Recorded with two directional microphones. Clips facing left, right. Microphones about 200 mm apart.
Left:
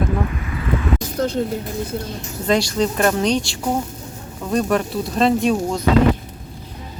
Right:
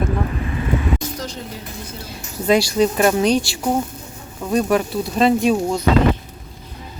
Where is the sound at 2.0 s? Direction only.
10° right (ahead or behind).